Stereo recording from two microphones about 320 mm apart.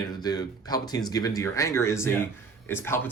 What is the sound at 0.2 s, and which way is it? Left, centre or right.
Speech, centre.